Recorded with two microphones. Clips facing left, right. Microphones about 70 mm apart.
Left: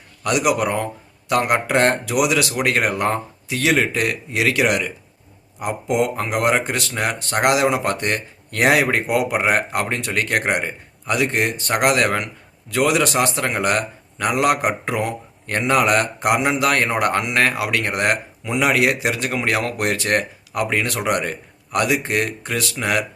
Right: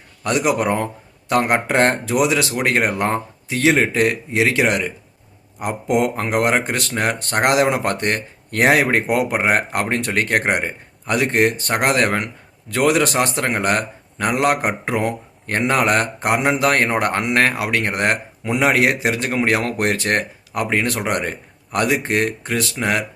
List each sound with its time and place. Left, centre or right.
0.3 s speech: right
5.5 s speech: right